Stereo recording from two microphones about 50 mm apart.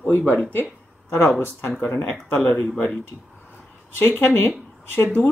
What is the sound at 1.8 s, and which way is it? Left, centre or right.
Speech, left.